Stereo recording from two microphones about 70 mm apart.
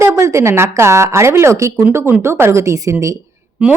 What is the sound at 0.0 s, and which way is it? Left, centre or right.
A woman's voice, right.